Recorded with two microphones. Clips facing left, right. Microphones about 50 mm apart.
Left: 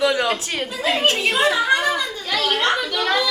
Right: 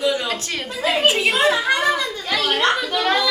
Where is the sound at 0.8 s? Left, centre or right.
Centre.